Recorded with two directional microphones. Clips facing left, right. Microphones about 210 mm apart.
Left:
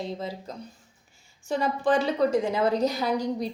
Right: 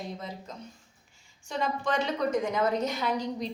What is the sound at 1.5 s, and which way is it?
A woman's voice, 35° left (ahead or behind).